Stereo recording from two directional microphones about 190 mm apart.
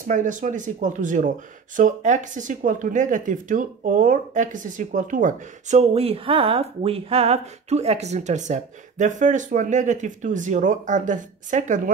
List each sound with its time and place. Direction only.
0.0 s speech: 40° right (ahead or behind)